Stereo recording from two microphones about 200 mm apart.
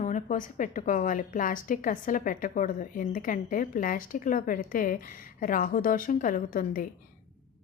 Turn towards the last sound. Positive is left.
turn(degrees=40)  # may be behind; listen again after turning